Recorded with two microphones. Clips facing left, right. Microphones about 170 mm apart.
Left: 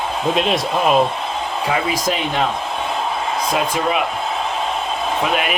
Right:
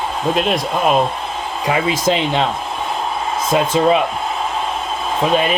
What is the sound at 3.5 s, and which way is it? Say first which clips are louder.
Speech: right 7 dB; 25° right (ahead or behind).